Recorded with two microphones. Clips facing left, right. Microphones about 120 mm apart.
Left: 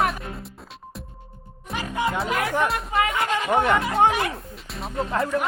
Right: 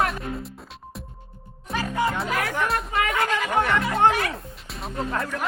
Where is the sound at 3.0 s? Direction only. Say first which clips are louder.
Left 2 dB; 25° left (ahead or behind).